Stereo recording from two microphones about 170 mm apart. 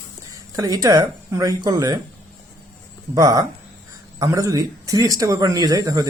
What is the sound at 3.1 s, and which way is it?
A man's voice, 20° right (ahead or behind).